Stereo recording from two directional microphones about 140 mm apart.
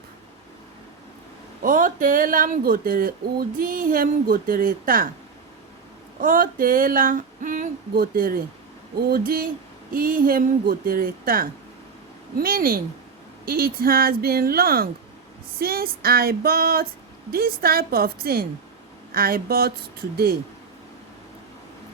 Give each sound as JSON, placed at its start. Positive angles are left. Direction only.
{"t": 1.6, "sound": "speech", "side_deg": -75}
{"t": 6.1, "sound": "speech", "side_deg": -80}